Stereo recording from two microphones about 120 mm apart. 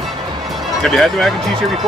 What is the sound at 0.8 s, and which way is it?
Speech, centre (ahead or behind).